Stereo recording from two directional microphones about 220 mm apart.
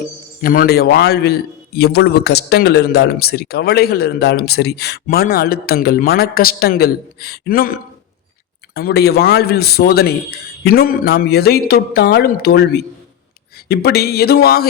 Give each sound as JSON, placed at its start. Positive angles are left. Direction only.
{"t": 0.4, "sound": "a man's voice", "side_deg": 40}